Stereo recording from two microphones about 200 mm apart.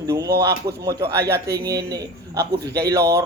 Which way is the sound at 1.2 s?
55° right (ahead or behind).